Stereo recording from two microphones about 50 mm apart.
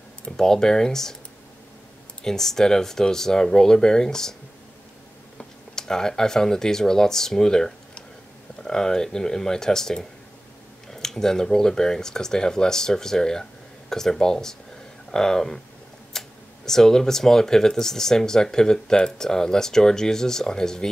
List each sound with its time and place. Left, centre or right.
0.2 s speech: centre
2.2 s speech: centre
5.4 s speech: centre